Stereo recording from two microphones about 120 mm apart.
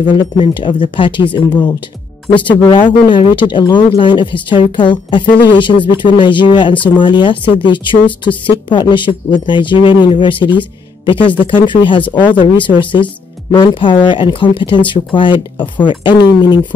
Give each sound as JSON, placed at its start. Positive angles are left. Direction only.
{"t": 0.0, "sound": "speech", "side_deg": 40}